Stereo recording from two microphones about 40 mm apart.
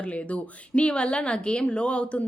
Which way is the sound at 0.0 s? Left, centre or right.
Left.